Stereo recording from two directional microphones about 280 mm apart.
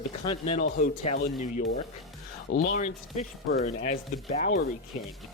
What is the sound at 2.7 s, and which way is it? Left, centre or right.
Speech, left.